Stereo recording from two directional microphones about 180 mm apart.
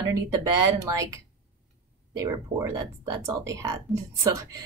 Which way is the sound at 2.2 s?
15° right (ahead or behind).